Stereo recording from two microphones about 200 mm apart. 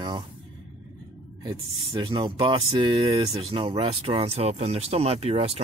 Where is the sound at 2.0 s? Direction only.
25° right (ahead or behind).